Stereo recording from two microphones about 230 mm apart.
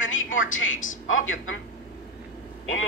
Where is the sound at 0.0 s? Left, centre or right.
Left.